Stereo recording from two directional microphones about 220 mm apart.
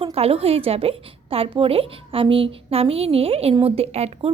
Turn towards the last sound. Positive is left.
turn(degrees=-25)  # may be behind; listen again after turning